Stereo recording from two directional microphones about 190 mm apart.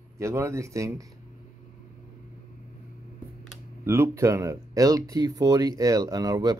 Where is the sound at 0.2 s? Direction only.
15° right (ahead or behind).